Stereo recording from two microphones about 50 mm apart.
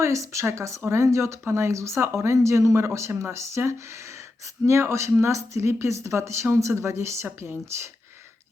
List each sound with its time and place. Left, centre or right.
0.0 s a woman's voice: right
0.8 s a woman's voice: right
2.7 s a woman's voice: right